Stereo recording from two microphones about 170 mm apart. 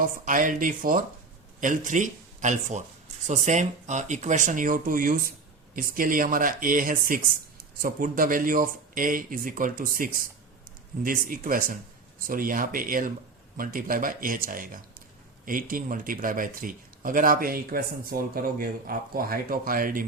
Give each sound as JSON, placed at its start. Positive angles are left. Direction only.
{"t": 0.0, "sound": "speech", "side_deg": -50}